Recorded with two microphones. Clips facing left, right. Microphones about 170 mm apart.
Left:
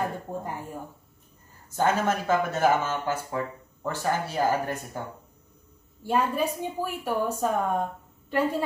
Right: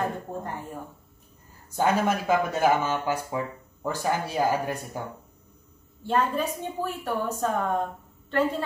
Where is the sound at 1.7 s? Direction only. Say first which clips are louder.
Right 1 dB; 10° right (ahead or behind).